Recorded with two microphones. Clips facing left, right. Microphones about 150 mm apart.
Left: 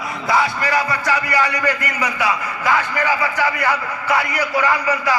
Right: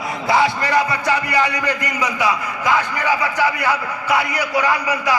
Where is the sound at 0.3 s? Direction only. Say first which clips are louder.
Right 2 dB; 25° right (ahead or behind).